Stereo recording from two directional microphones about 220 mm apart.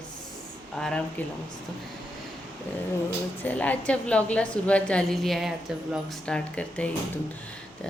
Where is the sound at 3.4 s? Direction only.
5° left (ahead or behind).